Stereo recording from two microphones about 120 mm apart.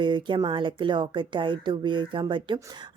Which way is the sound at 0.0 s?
40° right (ahead or behind).